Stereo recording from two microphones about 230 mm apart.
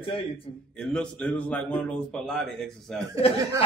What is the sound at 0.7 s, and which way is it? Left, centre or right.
Speech, centre.